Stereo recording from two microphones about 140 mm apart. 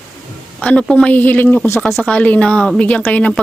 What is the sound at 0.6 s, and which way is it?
A woman's voice, 10° left (ahead or behind).